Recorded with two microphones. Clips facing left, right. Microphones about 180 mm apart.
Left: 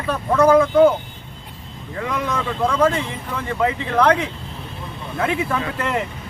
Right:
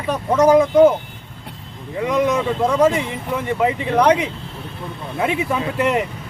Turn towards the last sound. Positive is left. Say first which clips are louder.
# right 4 dB
turn(degrees=-20)  # may be behind; listen again after turning